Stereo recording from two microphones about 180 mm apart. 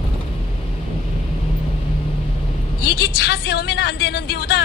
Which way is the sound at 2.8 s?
65° left (ahead or behind).